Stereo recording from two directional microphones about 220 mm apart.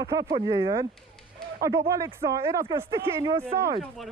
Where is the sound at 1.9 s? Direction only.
15° right (ahead or behind).